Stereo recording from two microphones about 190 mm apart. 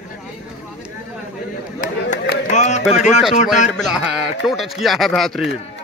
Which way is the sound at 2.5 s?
40° left (ahead or behind).